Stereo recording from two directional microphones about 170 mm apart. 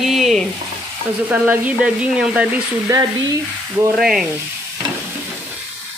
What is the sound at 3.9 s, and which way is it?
Speech, 5° right (ahead or behind).